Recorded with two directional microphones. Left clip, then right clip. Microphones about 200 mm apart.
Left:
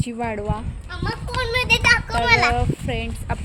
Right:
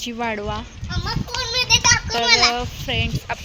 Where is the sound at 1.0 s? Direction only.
35° left (ahead or behind).